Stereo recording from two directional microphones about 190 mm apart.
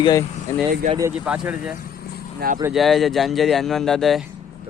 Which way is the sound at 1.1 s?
5° right (ahead or behind).